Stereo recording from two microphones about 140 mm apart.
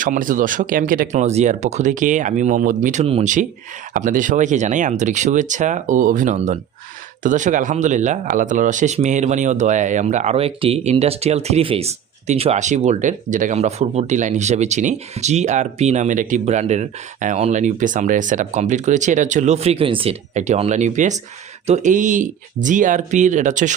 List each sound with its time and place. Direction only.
0.0 s speech: 75° right (ahead or behind)
1.1 s speech: 55° right (ahead or behind)
3.0 s speech: 45° right (ahead or behind)
3.9 s speech: 70° right (ahead or behind)
6.3 s speech: 55° right (ahead or behind)
7.2 s speech: 65° right (ahead or behind); by 20.1 s 40° right (ahead or behind)
20.3 s speech: 55° right (ahead or behind)